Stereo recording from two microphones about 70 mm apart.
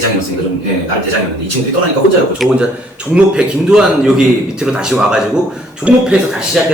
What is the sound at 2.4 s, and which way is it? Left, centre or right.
A man's voice, centre.